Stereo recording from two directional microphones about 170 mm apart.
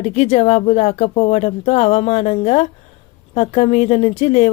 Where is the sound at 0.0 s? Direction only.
40° left (ahead or behind).